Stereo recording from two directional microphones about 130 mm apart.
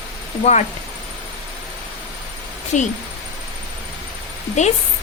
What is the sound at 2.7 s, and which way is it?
Speech, 65° left (ahead or behind).